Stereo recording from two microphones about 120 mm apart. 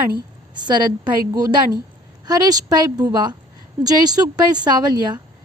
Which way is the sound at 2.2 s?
30° right (ahead or behind).